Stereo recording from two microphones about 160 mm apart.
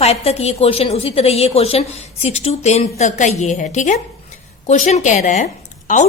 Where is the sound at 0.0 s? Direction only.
40° left (ahead or behind).